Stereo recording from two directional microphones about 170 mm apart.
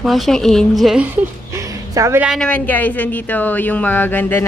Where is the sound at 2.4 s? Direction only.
10° left (ahead or behind).